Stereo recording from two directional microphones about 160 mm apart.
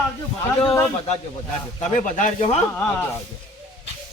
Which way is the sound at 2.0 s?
55° left (ahead or behind).